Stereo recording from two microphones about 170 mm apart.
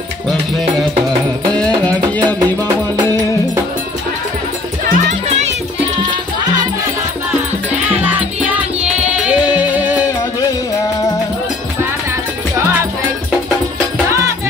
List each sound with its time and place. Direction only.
4.8 s music: 45° right (ahead or behind)
8.0 s music: 10° right (ahead or behind)